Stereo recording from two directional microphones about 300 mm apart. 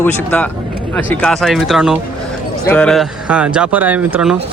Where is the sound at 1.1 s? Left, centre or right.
Centre.